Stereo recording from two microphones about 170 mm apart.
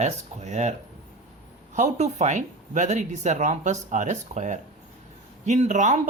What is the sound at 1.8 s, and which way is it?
Speech, 40° right (ahead or behind).